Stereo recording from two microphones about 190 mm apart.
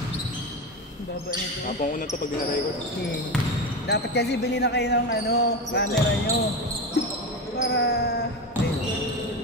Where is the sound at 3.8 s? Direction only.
60° left (ahead or behind).